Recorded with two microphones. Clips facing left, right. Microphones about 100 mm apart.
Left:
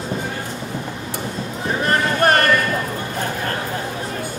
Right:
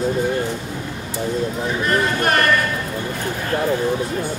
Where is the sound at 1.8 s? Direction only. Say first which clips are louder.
Left 2 dB; 40° left (ahead or behind).